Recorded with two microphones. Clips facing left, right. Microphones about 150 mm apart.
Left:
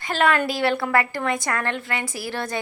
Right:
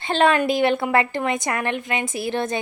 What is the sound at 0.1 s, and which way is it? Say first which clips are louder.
A woman's voice: right 3 dB; 25° right (ahead or behind).